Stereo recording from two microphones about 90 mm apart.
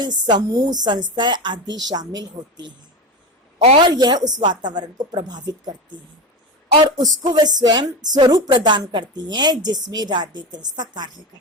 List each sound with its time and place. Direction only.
0.0 s speech: 50° right (ahead or behind)
3.6 s speech: 60° right (ahead or behind)
7.0 s speech: 45° right (ahead or behind)